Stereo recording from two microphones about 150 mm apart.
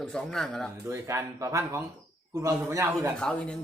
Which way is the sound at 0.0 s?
5° left (ahead or behind).